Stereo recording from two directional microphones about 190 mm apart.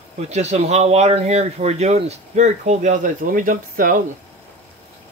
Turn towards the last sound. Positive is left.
turn(degrees=-45)  # may be behind; listen again after turning